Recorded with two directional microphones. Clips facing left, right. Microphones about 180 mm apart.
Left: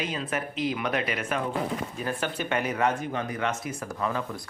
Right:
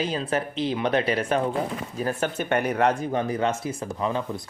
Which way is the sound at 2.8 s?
35° right (ahead or behind).